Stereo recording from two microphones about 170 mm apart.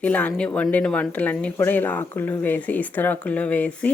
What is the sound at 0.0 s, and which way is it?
A woman's voice, 10° left (ahead or behind).